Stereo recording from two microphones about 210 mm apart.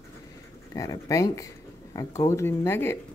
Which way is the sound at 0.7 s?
15° left (ahead or behind).